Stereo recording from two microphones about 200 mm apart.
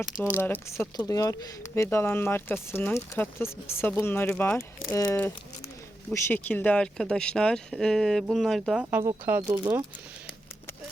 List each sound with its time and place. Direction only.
0.3 s speech: 10° left (ahead or behind); by 9.8 s 15° right (ahead or behind)